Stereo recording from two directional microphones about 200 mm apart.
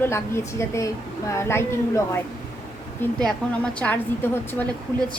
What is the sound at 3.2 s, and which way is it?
A woman's voice, 5° left (ahead or behind).